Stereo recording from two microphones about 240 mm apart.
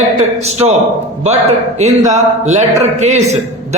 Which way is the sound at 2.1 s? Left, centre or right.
Right.